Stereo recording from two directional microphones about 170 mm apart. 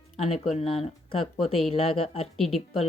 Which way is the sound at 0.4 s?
35° left (ahead or behind).